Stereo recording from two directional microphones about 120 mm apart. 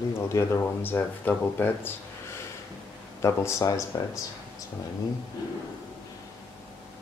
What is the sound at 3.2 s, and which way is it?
Speech, 25° left (ahead or behind).